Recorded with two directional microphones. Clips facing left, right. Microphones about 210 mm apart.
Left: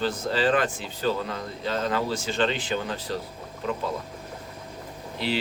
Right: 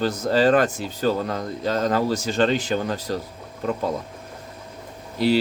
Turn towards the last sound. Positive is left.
turn(degrees=-40)  # may be behind; listen again after turning